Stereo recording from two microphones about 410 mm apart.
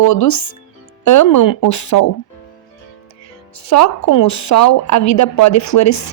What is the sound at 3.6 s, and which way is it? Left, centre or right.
A woman's voice, left.